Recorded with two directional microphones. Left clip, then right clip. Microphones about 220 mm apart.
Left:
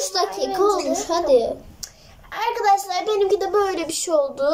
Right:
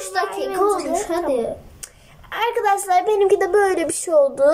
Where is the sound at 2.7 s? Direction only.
30° right (ahead or behind).